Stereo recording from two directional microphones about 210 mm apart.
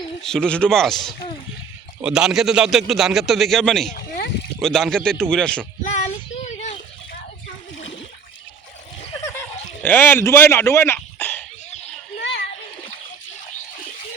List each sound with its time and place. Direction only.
0.2 s a man's voice: 5° left (ahead or behind)
3.9 s rowboat: 50° left (ahead or behind)
4.6 s a man's voice: centre (ahead or behind)
5.8 s child singing: 35° left (ahead or behind)
6.3 s a sound: 35° left (ahead or behind)
9.8 s speech: 10° left (ahead or behind)